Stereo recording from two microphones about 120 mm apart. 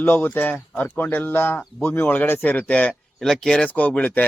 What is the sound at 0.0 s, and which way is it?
Speech, 15° left (ahead or behind).